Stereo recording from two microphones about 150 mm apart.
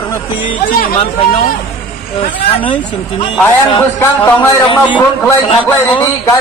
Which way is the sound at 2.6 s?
35° left (ahead or behind).